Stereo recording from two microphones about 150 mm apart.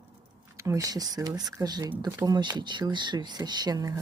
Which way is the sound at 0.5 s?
20° right (ahead or behind).